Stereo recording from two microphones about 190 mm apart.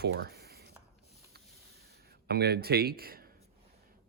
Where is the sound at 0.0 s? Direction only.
55° right (ahead or behind).